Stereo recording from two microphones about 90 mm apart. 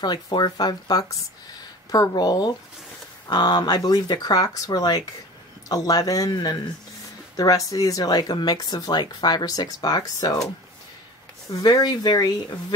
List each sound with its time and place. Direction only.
0.0 s speech: 55° left (ahead or behind)
11.5 s speech: 45° left (ahead or behind)